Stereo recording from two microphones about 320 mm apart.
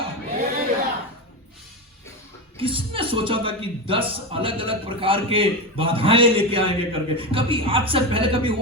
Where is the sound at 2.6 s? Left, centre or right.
Centre.